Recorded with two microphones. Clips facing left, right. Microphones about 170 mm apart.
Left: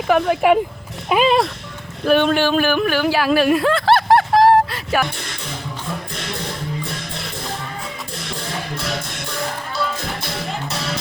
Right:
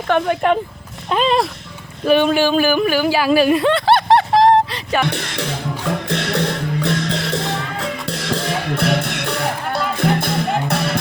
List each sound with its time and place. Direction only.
0.1 s speech: 5° left (ahead or behind)
5.0 s music: 85° right; by 11.0 s 60° right (ahead or behind)